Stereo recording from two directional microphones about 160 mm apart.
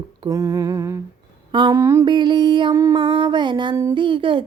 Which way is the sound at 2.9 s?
35° right (ahead or behind).